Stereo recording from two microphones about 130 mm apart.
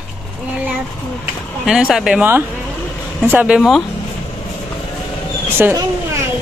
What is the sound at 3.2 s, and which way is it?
Speech, 10° right (ahead or behind).